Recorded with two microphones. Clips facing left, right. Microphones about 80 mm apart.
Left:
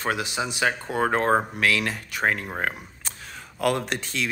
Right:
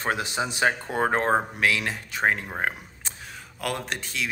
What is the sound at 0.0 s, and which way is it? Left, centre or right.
Speech, right.